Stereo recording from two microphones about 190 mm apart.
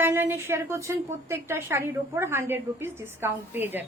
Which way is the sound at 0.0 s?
10° right (ahead or behind).